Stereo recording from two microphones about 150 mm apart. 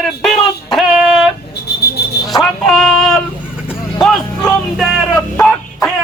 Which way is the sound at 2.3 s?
Centre (ahead or behind).